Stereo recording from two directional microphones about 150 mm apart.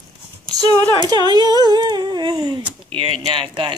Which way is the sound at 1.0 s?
30° right (ahead or behind).